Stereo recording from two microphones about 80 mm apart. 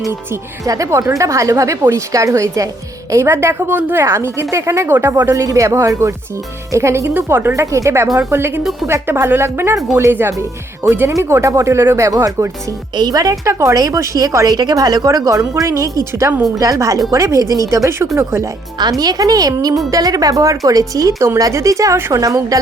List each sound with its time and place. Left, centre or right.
0.6 s speech: right
1.8 s speech: right
2.1 s speech: right
3.8 s speech: right
4.0 s speech: right
4.9 s speech: right
5.3 s speech: right
7.5 s speech: right
13.0 s speech: right
13.4 s a woman's voice: right
14.6 s a woman's voice: right
18.8 s a woman's voice: right